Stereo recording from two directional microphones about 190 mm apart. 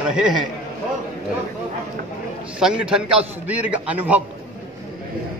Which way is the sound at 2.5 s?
5° right (ahead or behind).